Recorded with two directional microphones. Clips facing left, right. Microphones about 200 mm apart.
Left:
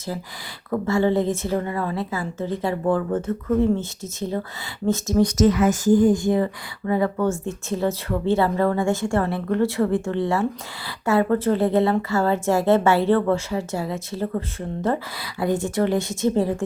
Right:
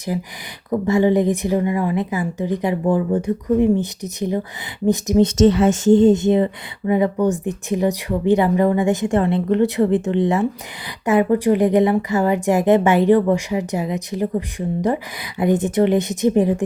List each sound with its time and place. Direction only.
0.0 s a woman's voice: 15° right (ahead or behind)